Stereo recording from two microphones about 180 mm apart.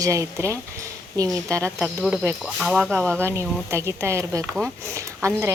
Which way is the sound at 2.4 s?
Centre (ahead or behind).